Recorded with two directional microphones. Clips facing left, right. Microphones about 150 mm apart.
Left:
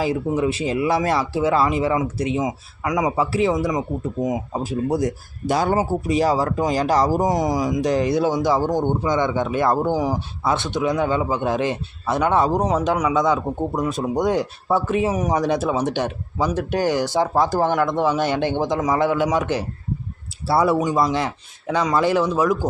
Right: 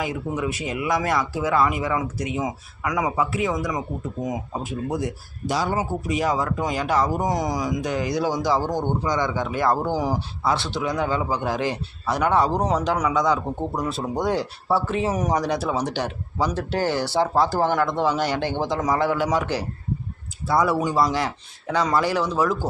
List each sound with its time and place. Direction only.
0.0 s speech: 30° left (ahead or behind)
4.6 s speech: 35° left (ahead or behind); by 5.7 s 55° left (ahead or behind)
5.7 s speech: 35° left (ahead or behind)
7.3 s speech: 20° left (ahead or behind)
15.4 s speech: 20° left (ahead or behind)
20.7 s speech: 20° left (ahead or behind)